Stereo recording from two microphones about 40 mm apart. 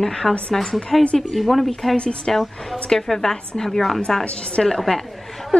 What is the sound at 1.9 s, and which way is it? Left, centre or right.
Speech, left.